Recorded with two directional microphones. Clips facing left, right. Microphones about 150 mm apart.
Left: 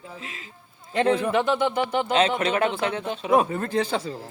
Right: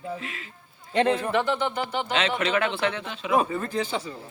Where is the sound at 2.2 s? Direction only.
40° left (ahead or behind).